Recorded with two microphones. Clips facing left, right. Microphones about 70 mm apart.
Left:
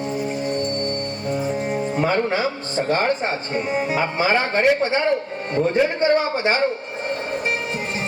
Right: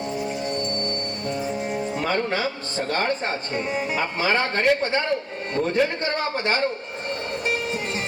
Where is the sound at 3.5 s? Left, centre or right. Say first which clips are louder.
Left 4 dB; left.